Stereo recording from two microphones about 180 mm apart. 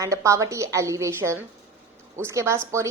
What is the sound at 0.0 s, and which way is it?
A woman's voice, 15° right (ahead or behind).